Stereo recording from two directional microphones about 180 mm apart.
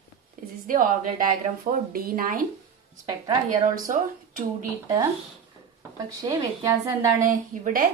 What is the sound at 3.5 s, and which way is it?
Speech, 45° right (ahead or behind).